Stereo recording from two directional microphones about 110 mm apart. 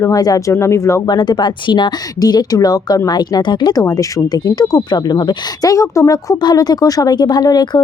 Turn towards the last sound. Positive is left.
turn(degrees=35)  # may be behind; listen again after turning